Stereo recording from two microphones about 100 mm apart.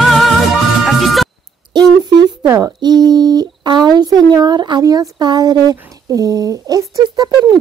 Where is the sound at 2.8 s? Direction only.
40° right (ahead or behind).